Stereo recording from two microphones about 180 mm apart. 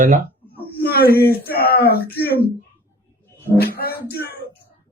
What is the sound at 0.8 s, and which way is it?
Speech, 60° left (ahead or behind).